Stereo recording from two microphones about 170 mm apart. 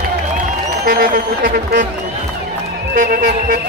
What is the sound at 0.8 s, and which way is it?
Speech, 65° right (ahead or behind).